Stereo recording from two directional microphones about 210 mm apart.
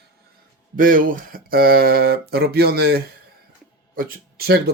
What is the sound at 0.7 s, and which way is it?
Speech, 40° right (ahead or behind).